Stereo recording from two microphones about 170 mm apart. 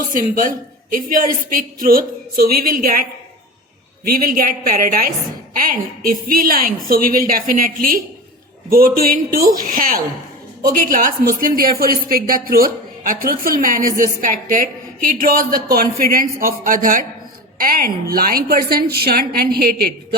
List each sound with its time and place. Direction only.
0.1 s a woman's voice: 55° right (ahead or behind)